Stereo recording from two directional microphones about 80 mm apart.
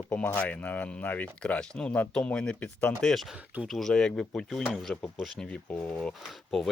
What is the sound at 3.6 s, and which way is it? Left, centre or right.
Speech, centre.